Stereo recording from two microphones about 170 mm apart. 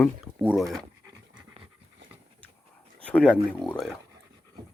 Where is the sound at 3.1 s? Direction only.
5° left (ahead or behind).